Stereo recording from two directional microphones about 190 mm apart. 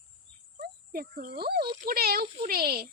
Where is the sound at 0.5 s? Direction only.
50° right (ahead or behind).